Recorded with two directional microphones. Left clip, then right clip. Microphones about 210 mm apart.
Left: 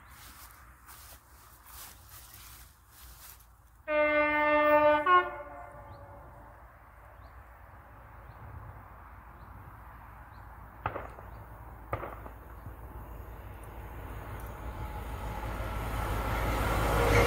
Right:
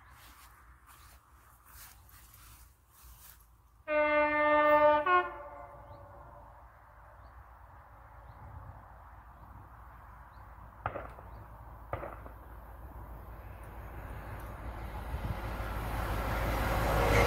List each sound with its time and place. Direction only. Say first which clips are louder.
3.8 s train: left 1 dB; 20° right (ahead or behind)
11.9 s fireworks: left 3 dB; 55° left (ahead or behind)
14.2 s vehicle: left 2 dB; 10° right (ahead or behind)